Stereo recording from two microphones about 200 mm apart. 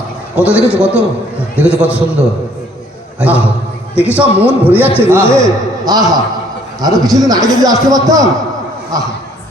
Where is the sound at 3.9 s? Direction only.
10° left (ahead or behind).